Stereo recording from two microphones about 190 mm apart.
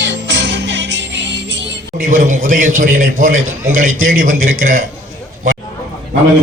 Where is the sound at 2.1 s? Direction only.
45° right (ahead or behind).